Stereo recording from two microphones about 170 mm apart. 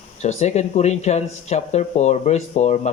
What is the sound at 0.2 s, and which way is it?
Speech, 40° left (ahead or behind).